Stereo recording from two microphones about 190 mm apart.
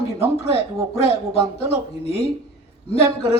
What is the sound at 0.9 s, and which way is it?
Speech, 30° left (ahead or behind).